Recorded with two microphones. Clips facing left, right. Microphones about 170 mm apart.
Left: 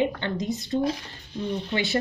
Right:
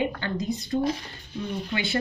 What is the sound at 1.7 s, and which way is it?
Speech, 25° left (ahead or behind).